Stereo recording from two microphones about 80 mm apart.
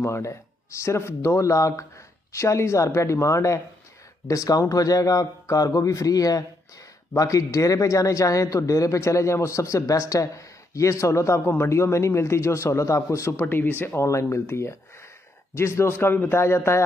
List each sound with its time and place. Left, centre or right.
0.0 s a man's voice: left